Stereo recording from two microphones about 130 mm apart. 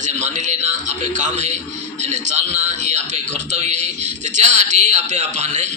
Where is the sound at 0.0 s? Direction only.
65° right (ahead or behind).